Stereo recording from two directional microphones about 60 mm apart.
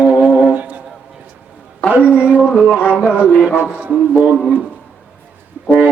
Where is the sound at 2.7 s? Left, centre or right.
Left.